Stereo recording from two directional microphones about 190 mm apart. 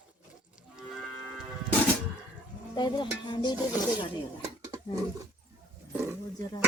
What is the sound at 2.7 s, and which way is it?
Stir, 25° left (ahead or behind).